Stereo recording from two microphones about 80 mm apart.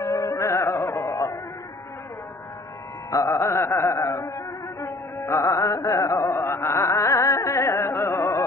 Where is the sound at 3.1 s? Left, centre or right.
Left.